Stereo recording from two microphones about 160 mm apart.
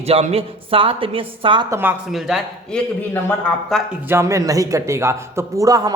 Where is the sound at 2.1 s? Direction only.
Centre (ahead or behind).